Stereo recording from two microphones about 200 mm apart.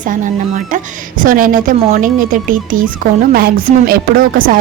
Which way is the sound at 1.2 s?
45° right (ahead or behind).